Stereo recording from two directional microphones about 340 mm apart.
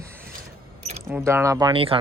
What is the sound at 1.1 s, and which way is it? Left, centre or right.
Speech, centre.